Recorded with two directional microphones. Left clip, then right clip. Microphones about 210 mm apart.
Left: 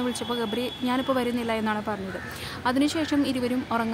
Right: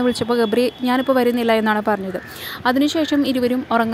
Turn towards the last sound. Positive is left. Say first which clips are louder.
# right 9 dB
turn(degrees=-25)  # may be behind; listen again after turning